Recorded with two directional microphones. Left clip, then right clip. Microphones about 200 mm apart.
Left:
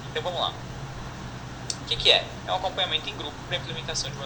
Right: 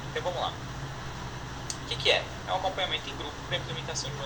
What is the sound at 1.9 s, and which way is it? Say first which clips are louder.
Speech: left 5 dB; 15° left (ahead or behind).